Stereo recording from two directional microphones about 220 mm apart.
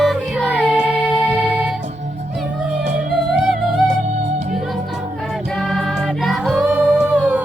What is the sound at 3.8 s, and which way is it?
Music, 30° right (ahead or behind).